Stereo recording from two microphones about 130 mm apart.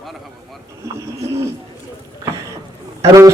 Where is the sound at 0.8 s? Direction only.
20° right (ahead or behind).